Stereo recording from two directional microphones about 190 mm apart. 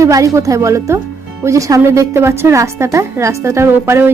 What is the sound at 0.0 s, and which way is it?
A woman's voice, 15° right (ahead or behind).